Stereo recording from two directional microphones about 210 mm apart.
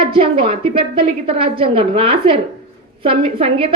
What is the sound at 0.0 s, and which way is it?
A woman's voice, 25° right (ahead or behind).